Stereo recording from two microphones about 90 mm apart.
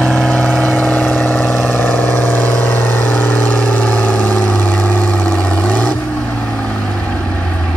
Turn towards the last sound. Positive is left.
turn(degrees=15)  # may be behind; listen again after turning